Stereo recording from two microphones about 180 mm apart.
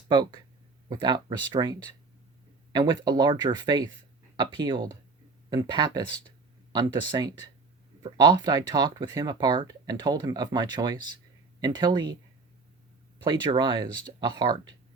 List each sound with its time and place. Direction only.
0.1 s speech: 25° right (ahead or behind)
13.2 s speech: 25° right (ahead or behind)